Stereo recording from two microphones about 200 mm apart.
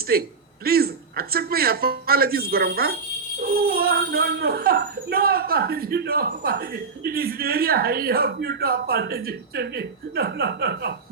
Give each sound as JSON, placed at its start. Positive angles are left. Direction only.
{"t": 0.1, "sound": "speech", "side_deg": -50}